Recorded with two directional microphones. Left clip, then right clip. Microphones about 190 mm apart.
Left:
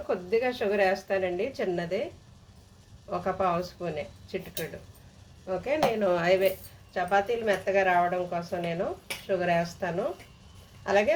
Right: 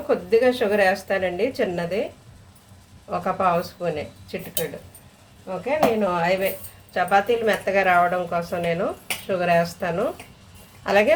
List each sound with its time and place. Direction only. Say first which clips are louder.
0.1 s a woman's voice: right 9 dB; centre (ahead or behind)
3.1 s a woman's voice: right 6 dB; centre (ahead or behind)
5.5 s speech: right 5 dB; 25° left (ahead or behind)
6.9 s a woman's voice: right 7 dB; 10° right (ahead or behind)